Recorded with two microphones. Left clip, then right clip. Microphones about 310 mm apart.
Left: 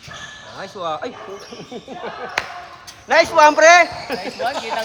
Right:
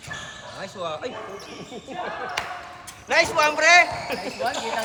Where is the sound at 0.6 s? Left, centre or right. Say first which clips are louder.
Left 6 dB; left.